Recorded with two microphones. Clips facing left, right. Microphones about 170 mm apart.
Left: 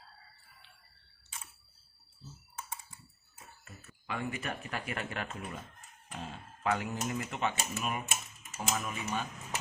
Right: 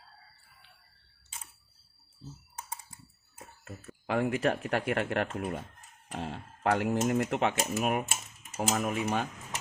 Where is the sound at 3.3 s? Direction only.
55° right (ahead or behind); by 7.6 s 75° right (ahead or behind).